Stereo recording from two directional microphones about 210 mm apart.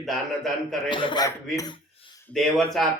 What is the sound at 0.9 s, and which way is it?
Speech, 25° left (ahead or behind).